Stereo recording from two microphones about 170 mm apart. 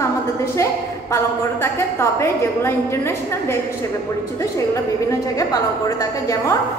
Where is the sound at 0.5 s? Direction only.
15° left (ahead or behind).